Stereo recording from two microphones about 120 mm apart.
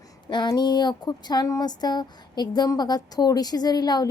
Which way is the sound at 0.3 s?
40° left (ahead or behind).